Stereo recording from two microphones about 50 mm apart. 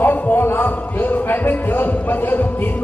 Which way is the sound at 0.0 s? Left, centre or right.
Left.